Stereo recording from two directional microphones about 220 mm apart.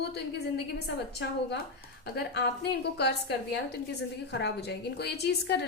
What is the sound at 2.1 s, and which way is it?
A woman's voice, 50° left (ahead or behind).